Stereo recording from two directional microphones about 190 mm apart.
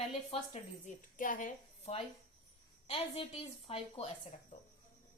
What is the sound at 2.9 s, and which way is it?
A woman's voice, 30° left (ahead or behind).